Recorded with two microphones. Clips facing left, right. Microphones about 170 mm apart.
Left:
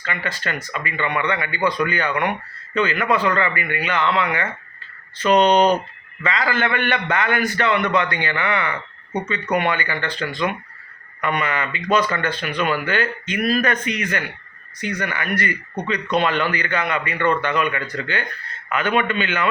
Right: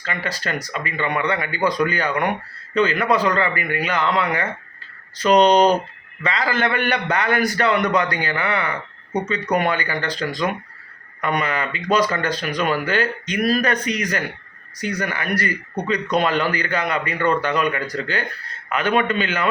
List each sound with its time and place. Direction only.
0.0 s speech: 35° right (ahead or behind)